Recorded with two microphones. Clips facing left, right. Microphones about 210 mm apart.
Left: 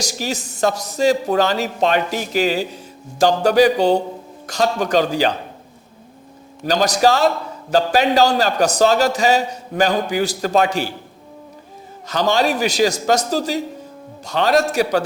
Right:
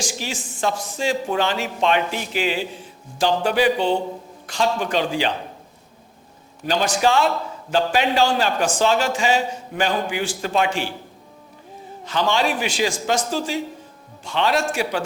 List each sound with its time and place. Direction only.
0.0 s a man's voice: 40° left (ahead or behind)
6.7 s a man's voice: 40° left (ahead or behind)
12.0 s a man's voice: 40° left (ahead or behind)